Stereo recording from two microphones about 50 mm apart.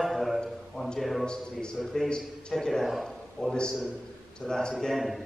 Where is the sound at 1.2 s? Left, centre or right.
Centre.